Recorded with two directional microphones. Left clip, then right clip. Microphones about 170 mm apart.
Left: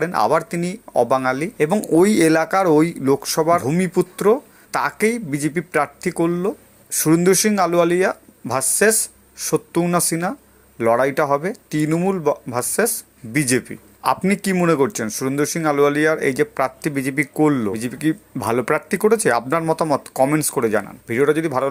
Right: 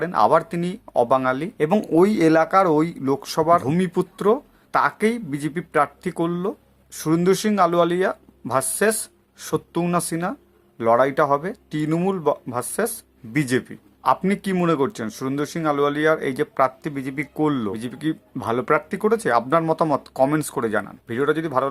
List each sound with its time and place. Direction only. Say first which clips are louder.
0.0 s speech: even; 15° left (ahead or behind)